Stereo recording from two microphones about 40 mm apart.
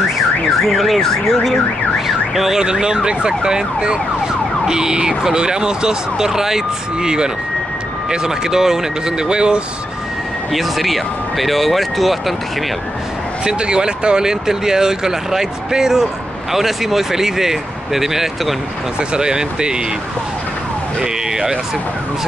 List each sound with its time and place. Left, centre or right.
0.7 s speech: centre
2.0 s speech: centre
2.6 s ambulance: centre
4.6 s speech: centre
10.5 s speech: centre
13.5 s speech: right
18.9 s ambulance: centre
21.0 s speech: centre